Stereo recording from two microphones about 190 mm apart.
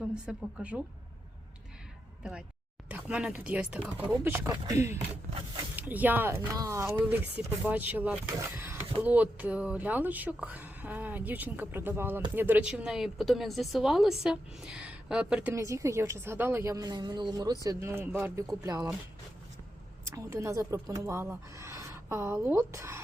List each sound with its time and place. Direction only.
0.1 s speech: 5° right (ahead or behind)
2.9 s a woman's voice: 5° right (ahead or behind)
20.1 s a woman's voice: 15° right (ahead or behind)